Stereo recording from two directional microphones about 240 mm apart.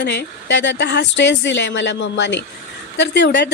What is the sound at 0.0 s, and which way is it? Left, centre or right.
Speech, left.